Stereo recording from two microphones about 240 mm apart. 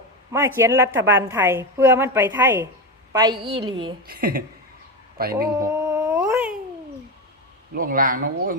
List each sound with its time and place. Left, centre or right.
0.3 s a woman's voice: centre
4.0 s speech: right
5.5 s cat: centre
7.7 s speech: right